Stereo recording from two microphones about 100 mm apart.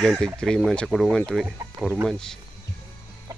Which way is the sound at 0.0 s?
10° left (ahead or behind).